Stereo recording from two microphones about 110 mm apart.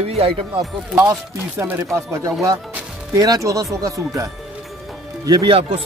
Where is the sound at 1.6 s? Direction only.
20° right (ahead or behind); by 5.5 s 40° right (ahead or behind).